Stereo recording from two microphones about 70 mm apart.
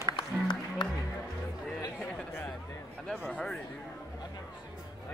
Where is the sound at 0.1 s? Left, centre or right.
Left.